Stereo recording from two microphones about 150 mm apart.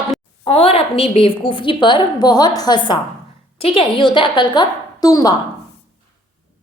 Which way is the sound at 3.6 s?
40° left (ahead or behind).